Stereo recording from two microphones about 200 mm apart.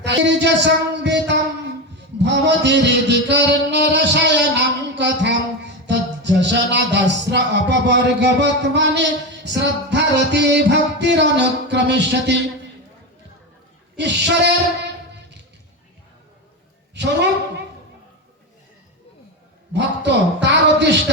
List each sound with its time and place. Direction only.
0.0 s music: 60° right (ahead or behind)
13.9 s music: 60° right (ahead or behind)
16.9 s a man's voice: 60° right (ahead or behind)
19.7 s music: 60° right (ahead or behind)